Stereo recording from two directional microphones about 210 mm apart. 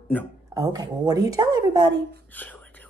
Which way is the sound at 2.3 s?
10° left (ahead or behind).